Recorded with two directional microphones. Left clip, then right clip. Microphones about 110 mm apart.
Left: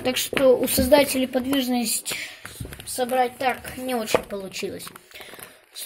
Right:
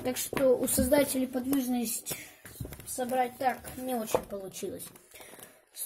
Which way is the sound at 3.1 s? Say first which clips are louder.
Left 6 dB; 25° right (ahead or behind).